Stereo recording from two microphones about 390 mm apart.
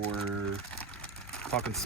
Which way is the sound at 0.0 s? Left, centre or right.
Right.